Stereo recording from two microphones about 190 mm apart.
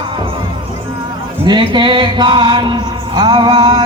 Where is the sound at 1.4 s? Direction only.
25° right (ahead or behind).